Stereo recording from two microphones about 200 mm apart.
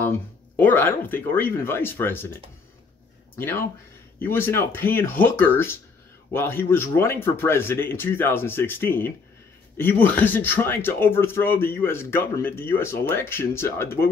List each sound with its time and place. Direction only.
0.6 s speech: 10° left (ahead or behind)
3.3 s speech: 10° left (ahead or behind)